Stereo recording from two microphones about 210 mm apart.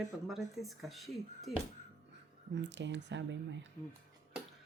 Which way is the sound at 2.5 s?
60° right (ahead or behind).